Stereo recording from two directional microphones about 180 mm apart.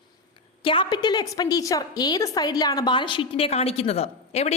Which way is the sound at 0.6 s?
30° left (ahead or behind).